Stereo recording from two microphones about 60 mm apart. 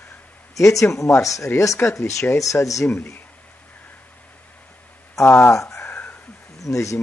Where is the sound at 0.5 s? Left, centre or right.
Left.